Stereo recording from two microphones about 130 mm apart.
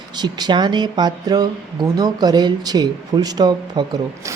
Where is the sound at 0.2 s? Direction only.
35° right (ahead or behind).